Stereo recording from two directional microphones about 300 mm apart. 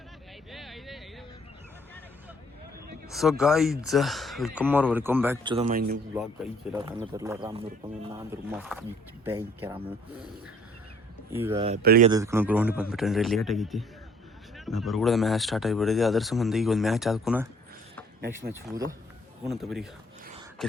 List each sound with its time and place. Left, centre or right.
0.5 s a sound: centre
3.1 s speech: centre; by 6.0 s right
6.1 s speech: centre
6.8 s speech: centre
8.1 s speech: centre
11.3 s speech: centre
11.5 s speech: centre
11.8 s speech: right
12.0 s speech: centre
18.7 s speech: centre
19.5 s speech: centre
20.6 s a sound: centre